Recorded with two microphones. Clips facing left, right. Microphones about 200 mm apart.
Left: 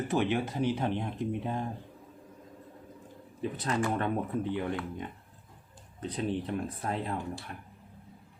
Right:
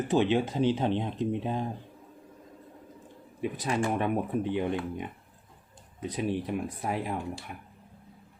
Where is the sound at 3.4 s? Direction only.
15° right (ahead or behind).